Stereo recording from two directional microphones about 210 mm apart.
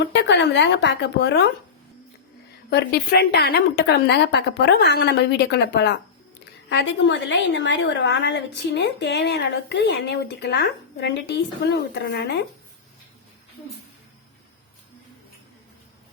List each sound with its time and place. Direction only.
0.1 s a woman's voice: 55° left (ahead or behind)
2.6 s a woman's voice: 50° left (ahead or behind)